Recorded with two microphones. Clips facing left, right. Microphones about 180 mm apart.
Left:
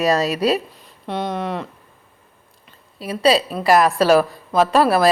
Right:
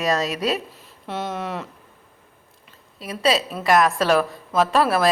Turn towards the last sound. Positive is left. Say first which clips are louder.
# left 4 dB
turn(degrees=0)  # may be behind; listen again after turning